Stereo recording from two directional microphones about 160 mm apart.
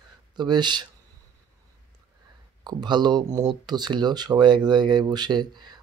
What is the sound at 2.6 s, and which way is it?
Speech, 25° right (ahead or behind).